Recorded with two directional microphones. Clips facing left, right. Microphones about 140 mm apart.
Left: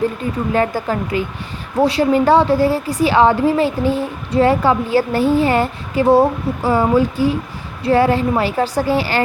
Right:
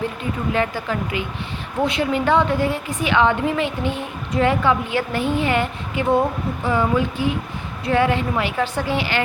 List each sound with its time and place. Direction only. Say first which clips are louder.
0.5 s a woman's voice: left 5 dB; 40° left (ahead or behind)